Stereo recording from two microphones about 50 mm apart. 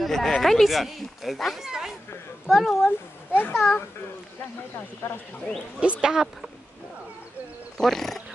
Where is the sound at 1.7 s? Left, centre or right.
Centre.